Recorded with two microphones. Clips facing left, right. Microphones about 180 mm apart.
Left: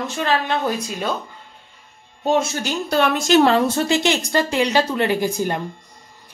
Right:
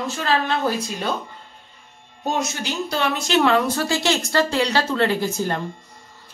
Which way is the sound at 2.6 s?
50° left (ahead or behind).